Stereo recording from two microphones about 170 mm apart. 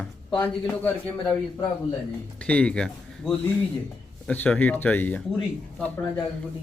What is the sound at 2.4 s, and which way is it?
Speech, 5° left (ahead or behind).